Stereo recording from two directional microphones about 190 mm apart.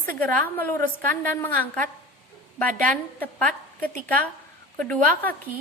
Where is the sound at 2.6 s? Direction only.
45° right (ahead or behind).